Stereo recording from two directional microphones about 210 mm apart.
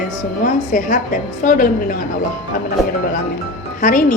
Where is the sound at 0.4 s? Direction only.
40° left (ahead or behind).